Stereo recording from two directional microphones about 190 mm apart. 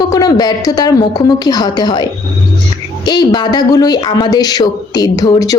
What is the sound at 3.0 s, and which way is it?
A woman's voice, 20° left (ahead or behind).